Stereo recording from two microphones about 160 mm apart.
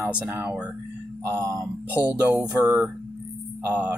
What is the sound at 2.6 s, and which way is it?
Speech, 15° right (ahead or behind).